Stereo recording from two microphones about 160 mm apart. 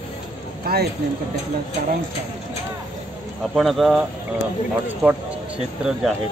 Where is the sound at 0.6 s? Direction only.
70° right (ahead or behind).